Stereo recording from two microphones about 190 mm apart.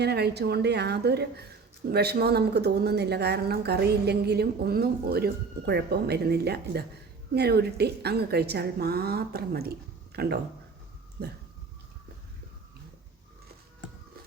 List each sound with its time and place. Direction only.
0.0 s a woman's voice: 60° right (ahead or behind)